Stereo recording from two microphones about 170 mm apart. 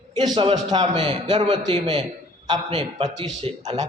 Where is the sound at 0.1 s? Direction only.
25° right (ahead or behind).